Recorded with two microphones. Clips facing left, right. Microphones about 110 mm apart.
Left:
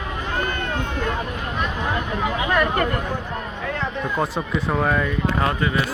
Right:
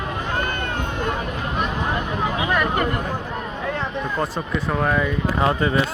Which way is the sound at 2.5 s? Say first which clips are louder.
Left 2 dB; 10° right (ahead or behind).